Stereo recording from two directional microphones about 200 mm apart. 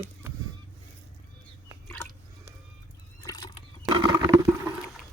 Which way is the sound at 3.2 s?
20° left (ahead or behind).